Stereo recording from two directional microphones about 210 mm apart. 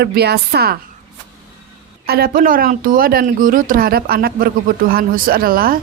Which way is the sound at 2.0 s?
45° right (ahead or behind).